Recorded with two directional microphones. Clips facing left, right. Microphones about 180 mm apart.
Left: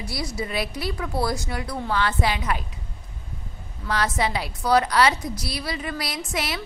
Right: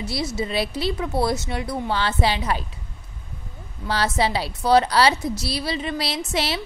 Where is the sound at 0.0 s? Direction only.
25° right (ahead or behind).